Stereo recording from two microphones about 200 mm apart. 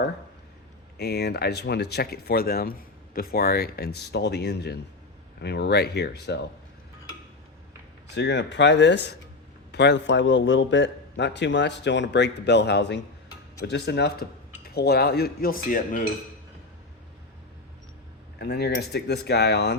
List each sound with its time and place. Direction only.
0.9 s a man's voice: 55° left (ahead or behind)
8.1 s a man's voice: 60° left (ahead or behind); by 16.0 s 45° left (ahead or behind)
18.3 s a man's voice: 55° left (ahead or behind)